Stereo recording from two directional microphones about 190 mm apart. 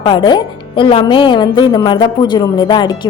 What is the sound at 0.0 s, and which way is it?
A woman's voice, 25° left (ahead or behind).